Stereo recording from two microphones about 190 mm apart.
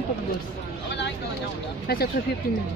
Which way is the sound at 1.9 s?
55° left (ahead or behind).